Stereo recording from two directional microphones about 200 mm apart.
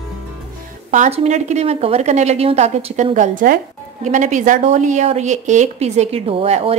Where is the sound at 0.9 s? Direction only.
35° right (ahead or behind).